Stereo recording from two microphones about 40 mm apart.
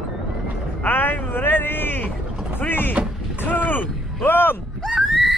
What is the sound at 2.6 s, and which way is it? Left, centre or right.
Speech, left.